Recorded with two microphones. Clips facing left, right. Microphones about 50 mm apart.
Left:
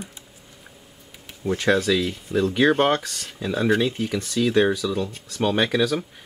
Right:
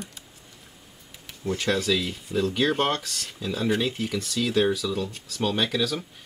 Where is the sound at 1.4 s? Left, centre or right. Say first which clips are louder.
Left 5 dB; centre.